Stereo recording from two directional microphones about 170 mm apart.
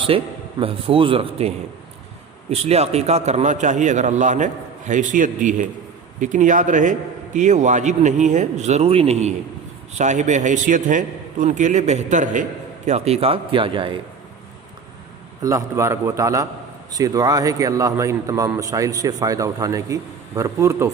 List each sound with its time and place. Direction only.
0.1 s a man's voice: 35° right (ahead or behind)
15.4 s a man's voice: 20° right (ahead or behind)